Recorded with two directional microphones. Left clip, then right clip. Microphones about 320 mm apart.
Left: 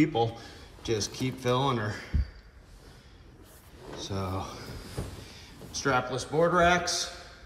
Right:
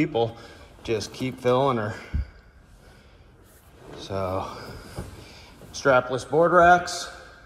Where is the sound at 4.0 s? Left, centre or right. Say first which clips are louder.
Right 7 dB; centre.